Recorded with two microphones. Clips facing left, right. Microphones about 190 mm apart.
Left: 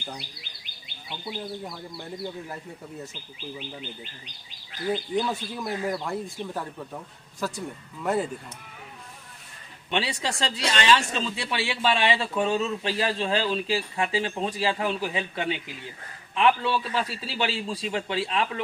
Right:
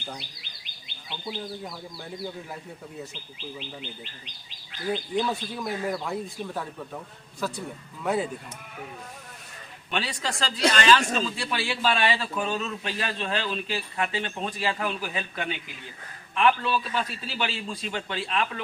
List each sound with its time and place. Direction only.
1.2 s speech: 5° left (ahead or behind)
4.9 s speech: 5° left (ahead or behind)
8.0 s speech: 10° right (ahead or behind)
9.9 s a man's voice: 25° left (ahead or behind)